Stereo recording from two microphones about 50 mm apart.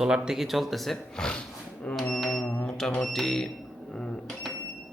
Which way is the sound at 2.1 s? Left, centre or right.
Centre.